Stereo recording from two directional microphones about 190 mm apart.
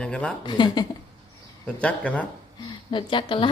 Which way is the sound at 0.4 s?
25° left (ahead or behind).